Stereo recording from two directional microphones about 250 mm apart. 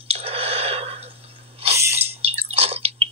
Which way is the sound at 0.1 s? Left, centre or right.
Right.